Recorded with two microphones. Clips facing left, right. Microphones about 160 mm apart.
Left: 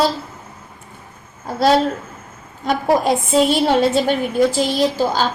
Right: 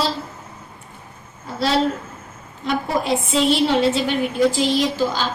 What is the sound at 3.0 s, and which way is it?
A woman's voice, 45° left (ahead or behind).